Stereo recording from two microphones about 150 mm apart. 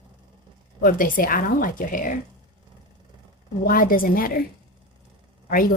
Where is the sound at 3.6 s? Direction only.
70° left (ahead or behind).